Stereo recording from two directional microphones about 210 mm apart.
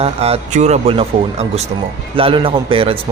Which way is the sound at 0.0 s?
30° right (ahead or behind).